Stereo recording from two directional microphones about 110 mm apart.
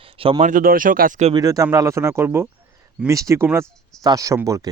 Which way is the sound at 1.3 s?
30° right (ahead or behind).